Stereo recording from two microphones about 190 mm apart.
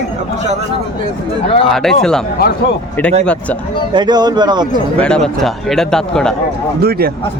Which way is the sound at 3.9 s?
20° right (ahead or behind).